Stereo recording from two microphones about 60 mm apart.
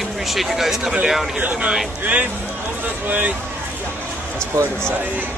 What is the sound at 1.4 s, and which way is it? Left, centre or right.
Speech, centre.